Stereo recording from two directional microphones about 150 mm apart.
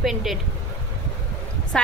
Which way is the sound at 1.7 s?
5° left (ahead or behind).